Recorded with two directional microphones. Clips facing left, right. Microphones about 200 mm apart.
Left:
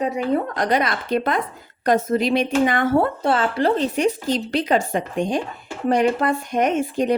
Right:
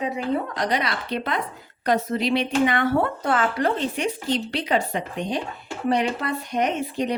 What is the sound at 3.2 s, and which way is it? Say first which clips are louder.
Speech: left 3 dB; 30° left (ahead or behind).